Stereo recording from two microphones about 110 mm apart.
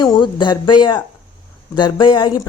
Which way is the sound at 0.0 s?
40° left (ahead or behind).